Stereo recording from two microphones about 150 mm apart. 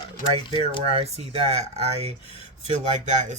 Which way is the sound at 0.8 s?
40° right (ahead or behind).